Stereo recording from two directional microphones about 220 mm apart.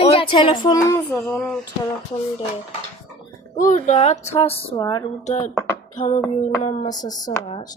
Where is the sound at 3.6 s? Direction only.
35° left (ahead or behind).